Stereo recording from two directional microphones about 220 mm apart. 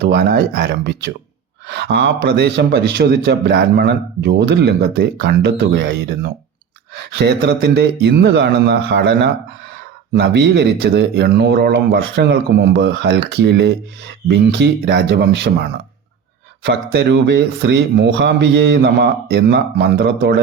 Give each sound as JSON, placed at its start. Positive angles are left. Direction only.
{"t": 0.0, "sound": "a man's voice", "side_deg": -50}